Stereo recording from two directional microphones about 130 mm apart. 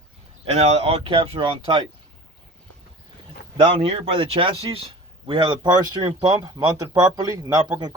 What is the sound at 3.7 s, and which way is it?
Speech, 50° right (ahead or behind).